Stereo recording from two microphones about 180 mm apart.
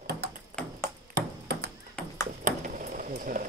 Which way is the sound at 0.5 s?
45° right (ahead or behind).